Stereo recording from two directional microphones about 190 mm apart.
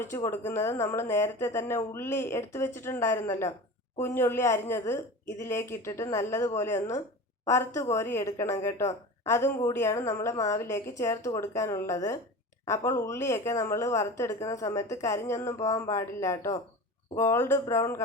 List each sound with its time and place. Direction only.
0.0 s a woman's voice: 15° left (ahead or behind)